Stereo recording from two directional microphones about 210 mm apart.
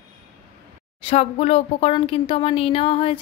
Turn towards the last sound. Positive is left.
turn(degrees=25)  # may be behind; listen again after turning